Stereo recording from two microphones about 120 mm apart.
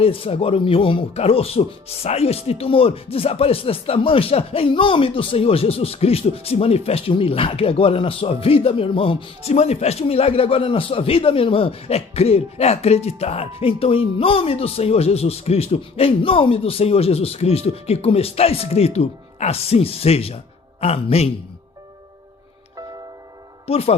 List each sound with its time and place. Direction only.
0.0 s speech: 50° left (ahead or behind)
23.6 s speech: 55° left (ahead or behind)